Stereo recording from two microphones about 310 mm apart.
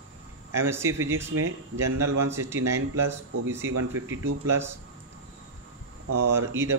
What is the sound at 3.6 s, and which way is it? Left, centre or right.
Speech, right.